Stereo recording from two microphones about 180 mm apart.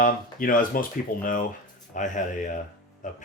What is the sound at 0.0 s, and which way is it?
Speech, 50° left (ahead or behind).